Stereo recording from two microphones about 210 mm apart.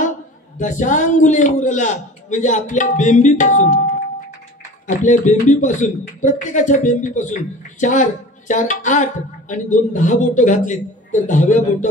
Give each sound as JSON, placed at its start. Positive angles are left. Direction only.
{"t": 0.6, "sound": "speech", "side_deg": 35}